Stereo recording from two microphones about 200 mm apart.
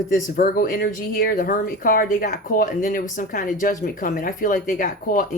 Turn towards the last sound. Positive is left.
turn(degrees=45)  # may be behind; listen again after turning